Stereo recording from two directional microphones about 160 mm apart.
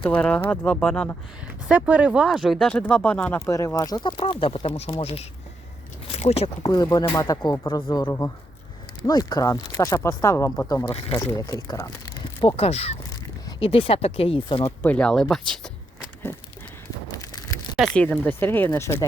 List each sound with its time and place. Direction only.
0.0 s speech: 5° left (ahead or behind)
1.6 s speech: 10° right (ahead or behind); by 5.2 s 35° left (ahead or behind)
6.1 s a sound: 40° left (ahead or behind)
6.6 s speech: 25° left (ahead or behind)
10.9 s speech: 35° left (ahead or behind)
11.3 s speech: 20° left (ahead or behind)
12.4 s speech: 35° left (ahead or behind)
14.6 s speech: 10° left (ahead or behind)
17.1 s a sound: 20° left (ahead or behind)
17.7 s speech: 5° left (ahead or behind)